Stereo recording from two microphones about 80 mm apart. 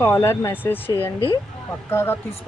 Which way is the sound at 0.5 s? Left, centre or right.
Left.